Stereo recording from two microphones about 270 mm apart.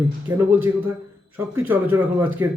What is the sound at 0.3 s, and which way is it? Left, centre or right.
Speech, centre.